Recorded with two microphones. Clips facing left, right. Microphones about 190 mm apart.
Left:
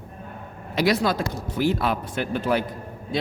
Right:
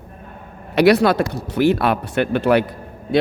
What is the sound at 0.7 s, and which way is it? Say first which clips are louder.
A man's voice: right 8 dB; 70° right (ahead or behind).